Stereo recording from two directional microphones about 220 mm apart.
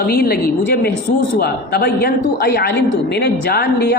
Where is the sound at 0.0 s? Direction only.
45° left (ahead or behind).